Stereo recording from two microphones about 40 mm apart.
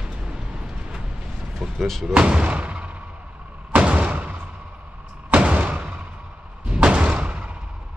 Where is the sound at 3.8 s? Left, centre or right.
Right.